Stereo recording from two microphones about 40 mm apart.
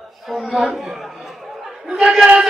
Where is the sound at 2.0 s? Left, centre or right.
Centre.